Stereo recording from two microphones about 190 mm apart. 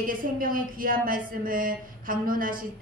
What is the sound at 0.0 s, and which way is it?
Speech, 45° right (ahead or behind).